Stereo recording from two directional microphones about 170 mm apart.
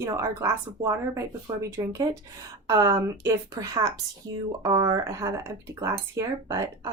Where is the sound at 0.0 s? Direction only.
20° right (ahead or behind).